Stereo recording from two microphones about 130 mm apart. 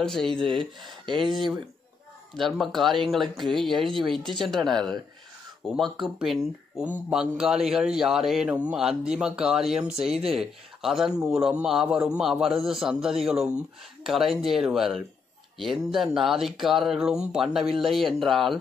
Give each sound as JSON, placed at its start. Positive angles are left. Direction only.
{"t": 0.0, "sound": "a man's voice", "side_deg": 5}
{"t": 0.6, "sound": "speech", "side_deg": -35}
{"t": 1.1, "sound": "a man's voice", "side_deg": 0}
{"t": 11.1, "sound": "a man's voice", "side_deg": -20}
{"t": 12.0, "sound": "a man's voice", "side_deg": -5}